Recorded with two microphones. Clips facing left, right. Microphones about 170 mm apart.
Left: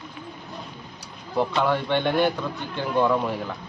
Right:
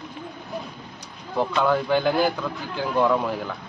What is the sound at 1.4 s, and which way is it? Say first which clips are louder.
A man's voice: right 1 dB; centre (ahead or behind).